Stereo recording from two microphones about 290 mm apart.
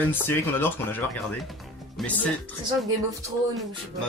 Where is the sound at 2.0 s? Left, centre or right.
Centre.